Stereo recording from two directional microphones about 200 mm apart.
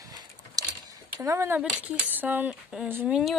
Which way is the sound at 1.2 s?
15° right (ahead or behind).